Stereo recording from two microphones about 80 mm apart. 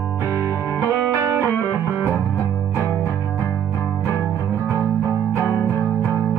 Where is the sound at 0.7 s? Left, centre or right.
Right.